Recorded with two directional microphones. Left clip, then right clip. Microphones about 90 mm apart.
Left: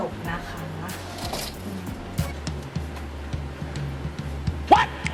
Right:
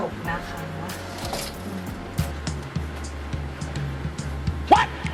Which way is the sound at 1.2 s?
20° right (ahead or behind).